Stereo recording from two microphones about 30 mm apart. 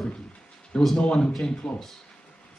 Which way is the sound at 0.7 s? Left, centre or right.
Left.